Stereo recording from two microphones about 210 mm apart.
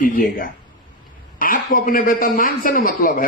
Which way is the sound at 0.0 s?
40° left (ahead or behind).